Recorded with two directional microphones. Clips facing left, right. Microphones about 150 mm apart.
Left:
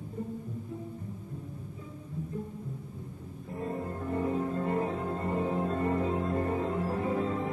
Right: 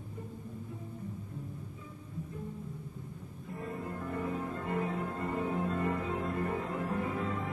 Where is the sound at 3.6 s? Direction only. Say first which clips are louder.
Left 4 dB; 30° left (ahead or behind).